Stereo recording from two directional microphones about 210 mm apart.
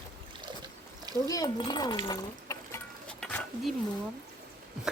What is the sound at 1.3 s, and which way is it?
Speech, 20° left (ahead or behind).